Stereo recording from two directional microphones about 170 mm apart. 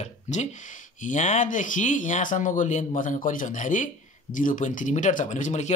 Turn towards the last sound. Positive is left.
turn(degrees=45)  # may be behind; listen again after turning